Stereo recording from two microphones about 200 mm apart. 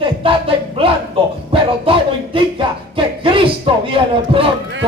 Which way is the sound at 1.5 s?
25° right (ahead or behind).